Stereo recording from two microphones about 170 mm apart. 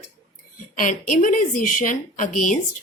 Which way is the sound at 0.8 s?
50° left (ahead or behind).